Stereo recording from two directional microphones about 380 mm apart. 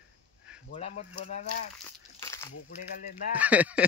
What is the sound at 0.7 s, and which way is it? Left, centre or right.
Speech, centre.